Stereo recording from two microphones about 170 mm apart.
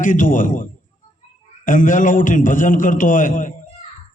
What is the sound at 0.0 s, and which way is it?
A man's voice, 50° left (ahead or behind).